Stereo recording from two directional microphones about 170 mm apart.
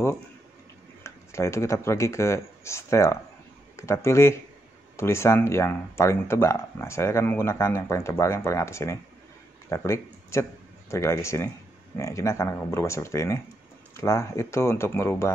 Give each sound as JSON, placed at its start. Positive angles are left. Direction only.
{"t": 1.0, "sound": "speech", "side_deg": 15}